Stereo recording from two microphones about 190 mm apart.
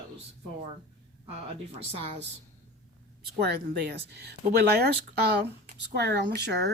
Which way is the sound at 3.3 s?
60° right (ahead or behind).